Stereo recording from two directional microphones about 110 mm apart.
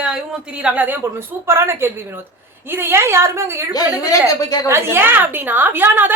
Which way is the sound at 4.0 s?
30° left (ahead or behind).